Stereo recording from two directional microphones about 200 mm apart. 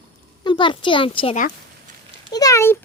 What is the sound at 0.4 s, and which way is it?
A child's voice, 25° left (ahead or behind).